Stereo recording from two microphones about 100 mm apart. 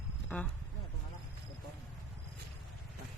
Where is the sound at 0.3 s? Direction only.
15° left (ahead or behind).